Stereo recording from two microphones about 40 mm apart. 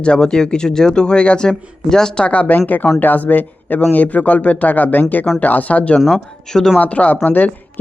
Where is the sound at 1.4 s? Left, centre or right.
Centre.